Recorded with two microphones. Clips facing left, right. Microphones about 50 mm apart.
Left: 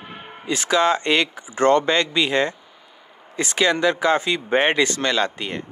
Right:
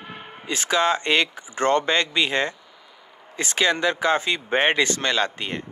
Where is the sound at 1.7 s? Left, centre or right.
Right.